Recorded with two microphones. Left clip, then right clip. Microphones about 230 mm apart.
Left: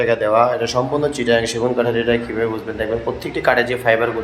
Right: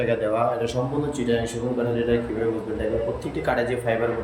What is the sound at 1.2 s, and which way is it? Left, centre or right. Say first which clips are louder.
Speech: left 8 dB; left.